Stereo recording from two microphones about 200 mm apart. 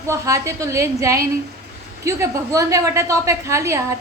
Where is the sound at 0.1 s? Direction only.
15° right (ahead or behind).